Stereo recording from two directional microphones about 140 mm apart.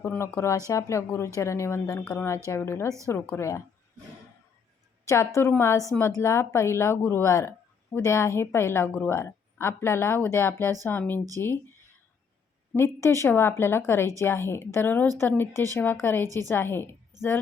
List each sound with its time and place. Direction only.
0.0 s speech: 20° left (ahead or behind)
5.0 s a woman's voice: 20° left (ahead or behind)
12.7 s a woman's voice: 20° left (ahead or behind)